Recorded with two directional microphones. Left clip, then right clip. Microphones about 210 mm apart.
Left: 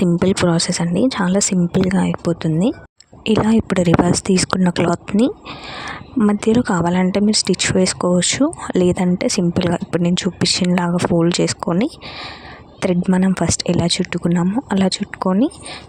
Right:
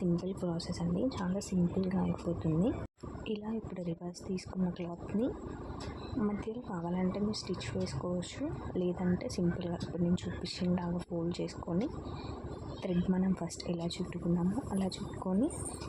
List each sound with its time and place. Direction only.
0.0 s a woman's voice: 55° left (ahead or behind)